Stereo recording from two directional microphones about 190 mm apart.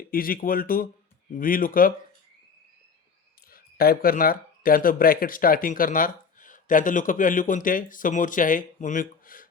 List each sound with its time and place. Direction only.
0.0 s speech: 50° left (ahead or behind)
3.5 s speech: 50° left (ahead or behind)